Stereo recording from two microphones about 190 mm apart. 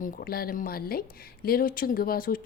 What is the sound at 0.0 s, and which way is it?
Speech, 50° left (ahead or behind).